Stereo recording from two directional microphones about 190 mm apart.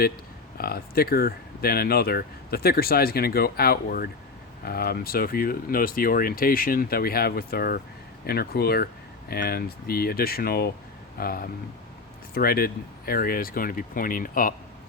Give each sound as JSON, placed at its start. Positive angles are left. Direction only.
{"t": 0.6, "sound": "speech", "side_deg": 55}